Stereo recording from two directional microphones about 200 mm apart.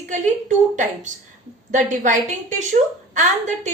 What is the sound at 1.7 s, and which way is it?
A woman's voice, 40° right (ahead or behind).